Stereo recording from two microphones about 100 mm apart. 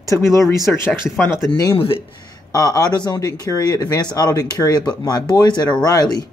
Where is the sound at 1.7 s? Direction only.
65° left (ahead or behind).